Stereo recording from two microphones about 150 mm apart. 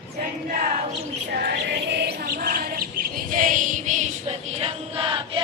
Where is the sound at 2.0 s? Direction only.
90° right; by 4.4 s 55° right (ahead or behind).